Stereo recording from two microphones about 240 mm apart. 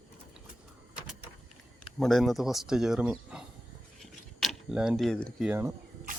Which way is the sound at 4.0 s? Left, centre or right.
Centre.